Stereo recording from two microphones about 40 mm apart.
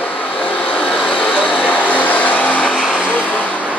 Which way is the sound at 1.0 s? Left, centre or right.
Left.